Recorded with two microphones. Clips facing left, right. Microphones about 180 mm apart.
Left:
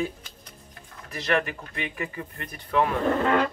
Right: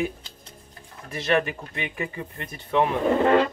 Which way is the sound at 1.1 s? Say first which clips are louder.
Right 3 dB; 25° right (ahead or behind).